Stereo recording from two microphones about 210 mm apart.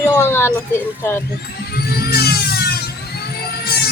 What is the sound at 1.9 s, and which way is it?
Music, 50° left (ahead or behind).